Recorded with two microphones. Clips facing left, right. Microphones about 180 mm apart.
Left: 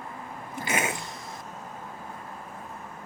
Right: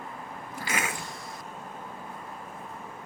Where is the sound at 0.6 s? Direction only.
20° left (ahead or behind).